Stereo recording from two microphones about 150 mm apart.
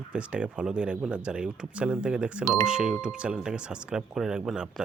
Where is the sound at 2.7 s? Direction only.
5° right (ahead or behind).